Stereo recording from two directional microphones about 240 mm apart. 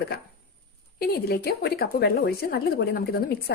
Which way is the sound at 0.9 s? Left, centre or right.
Left.